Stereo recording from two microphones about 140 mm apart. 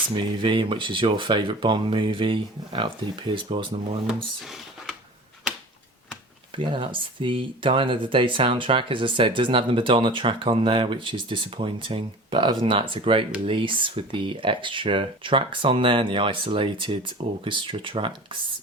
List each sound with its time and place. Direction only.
0.1 s speech: 35° right (ahead or behind)
4.4 s a sound: centre (ahead or behind)
6.6 s speech: 35° right (ahead or behind)